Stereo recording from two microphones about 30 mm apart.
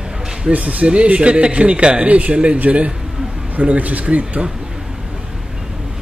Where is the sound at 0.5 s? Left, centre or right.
Right.